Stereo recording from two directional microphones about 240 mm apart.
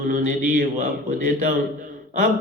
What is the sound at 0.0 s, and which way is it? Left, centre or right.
A man's voice, right.